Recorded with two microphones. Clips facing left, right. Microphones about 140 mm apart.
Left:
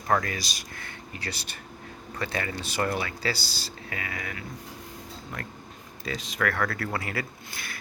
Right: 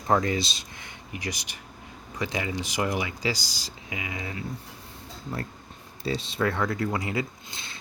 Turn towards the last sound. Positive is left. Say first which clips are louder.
# left 2 dB
turn(degrees=-20)  # may be behind; listen again after turning